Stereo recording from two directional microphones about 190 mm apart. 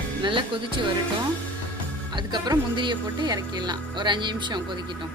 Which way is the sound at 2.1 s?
20° right (ahead or behind).